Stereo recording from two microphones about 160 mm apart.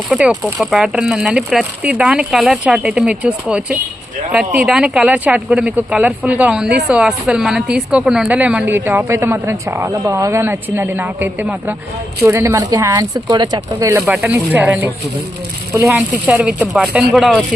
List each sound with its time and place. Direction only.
0.1 s a woman's voice: 5° right (ahead or behind)
14.0 s a woman's voice: centre (ahead or behind)